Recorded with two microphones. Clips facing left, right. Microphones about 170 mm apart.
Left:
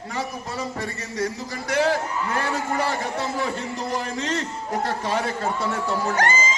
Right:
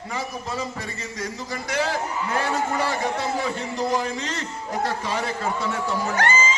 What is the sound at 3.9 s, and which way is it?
A man's voice, 60° left (ahead or behind).